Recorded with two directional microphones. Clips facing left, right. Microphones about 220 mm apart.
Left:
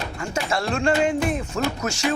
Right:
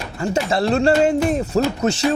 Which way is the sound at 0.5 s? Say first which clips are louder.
Right 5 dB; 35° right (ahead or behind).